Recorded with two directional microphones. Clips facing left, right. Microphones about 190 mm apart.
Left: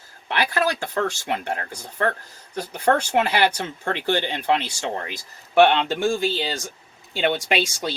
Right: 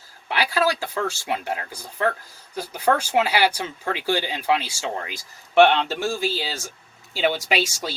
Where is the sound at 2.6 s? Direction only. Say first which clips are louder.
Left 1 dB; 5° right (ahead or behind).